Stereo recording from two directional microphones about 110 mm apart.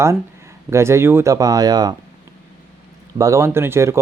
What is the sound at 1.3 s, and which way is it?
Speech, 35° right (ahead or behind).